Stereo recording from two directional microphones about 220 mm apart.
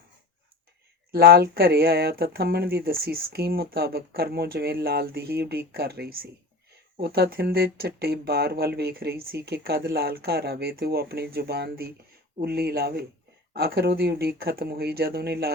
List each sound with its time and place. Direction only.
1.1 s speech: 45° right (ahead or behind)